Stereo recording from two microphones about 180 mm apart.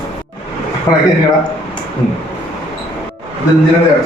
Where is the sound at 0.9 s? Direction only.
20° left (ahead or behind).